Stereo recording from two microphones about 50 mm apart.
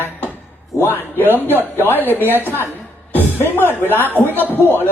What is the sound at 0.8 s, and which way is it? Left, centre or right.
Speech, left.